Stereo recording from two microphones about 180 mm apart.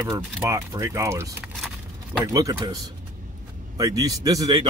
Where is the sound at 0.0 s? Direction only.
15° right (ahead or behind).